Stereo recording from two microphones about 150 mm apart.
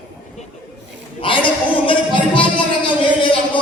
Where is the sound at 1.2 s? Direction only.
35° left (ahead or behind).